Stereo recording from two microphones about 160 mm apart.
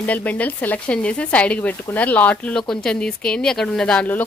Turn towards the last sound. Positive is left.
turn(degrees=10)  # may be behind; listen again after turning